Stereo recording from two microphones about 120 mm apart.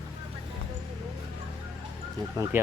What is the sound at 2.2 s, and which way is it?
Speech, 25° right (ahead or behind).